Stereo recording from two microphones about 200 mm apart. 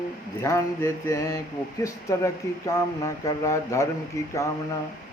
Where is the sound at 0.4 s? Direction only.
15° left (ahead or behind).